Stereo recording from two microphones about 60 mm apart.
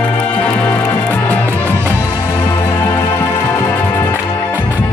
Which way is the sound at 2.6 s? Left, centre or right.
Left.